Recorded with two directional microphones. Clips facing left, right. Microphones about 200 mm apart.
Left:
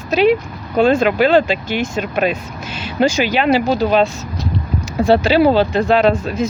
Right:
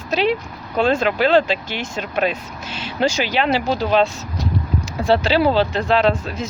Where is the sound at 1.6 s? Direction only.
50° left (ahead or behind).